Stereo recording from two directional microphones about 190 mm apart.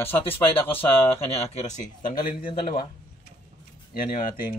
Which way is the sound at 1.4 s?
35° left (ahead or behind).